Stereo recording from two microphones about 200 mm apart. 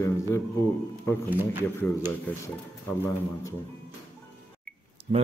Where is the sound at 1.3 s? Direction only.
10° right (ahead or behind).